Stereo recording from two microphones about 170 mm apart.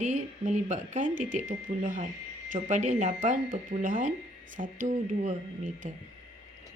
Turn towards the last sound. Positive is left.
turn(degrees=-50)  # may be behind; listen again after turning